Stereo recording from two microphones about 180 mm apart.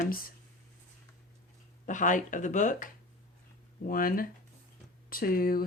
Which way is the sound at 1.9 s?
45° left (ahead or behind).